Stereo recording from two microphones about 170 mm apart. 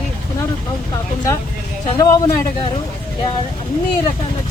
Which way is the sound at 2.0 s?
20° left (ahead or behind).